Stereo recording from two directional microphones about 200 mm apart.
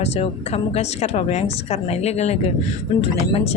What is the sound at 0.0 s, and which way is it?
A woman's voice, 30° left (ahead or behind).